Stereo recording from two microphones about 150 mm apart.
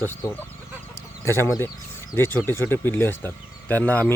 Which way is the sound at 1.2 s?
15° left (ahead or behind).